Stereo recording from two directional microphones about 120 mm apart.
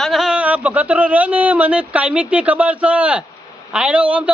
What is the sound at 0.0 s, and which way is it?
Speech, centre (ahead or behind).